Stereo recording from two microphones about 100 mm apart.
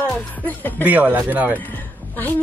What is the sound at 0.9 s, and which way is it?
Speech, 15° right (ahead or behind).